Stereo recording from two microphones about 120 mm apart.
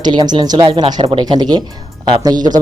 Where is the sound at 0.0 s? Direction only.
35° right (ahead or behind).